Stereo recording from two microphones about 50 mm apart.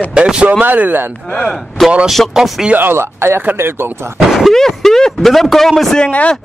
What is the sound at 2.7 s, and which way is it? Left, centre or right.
A man's voice, right.